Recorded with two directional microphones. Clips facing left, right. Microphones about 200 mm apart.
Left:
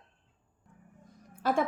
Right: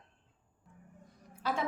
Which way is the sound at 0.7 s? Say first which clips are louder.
Even; centre (ahead or behind).